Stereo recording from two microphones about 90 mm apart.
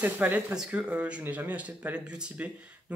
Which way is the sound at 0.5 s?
5° right (ahead or behind).